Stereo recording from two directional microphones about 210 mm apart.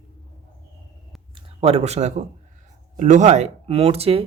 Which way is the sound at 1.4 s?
30° right (ahead or behind).